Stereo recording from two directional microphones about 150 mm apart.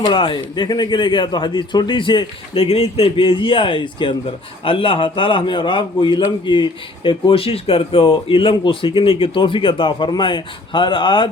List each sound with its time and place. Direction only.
0.0 s a man's voice: 30° left (ahead or behind)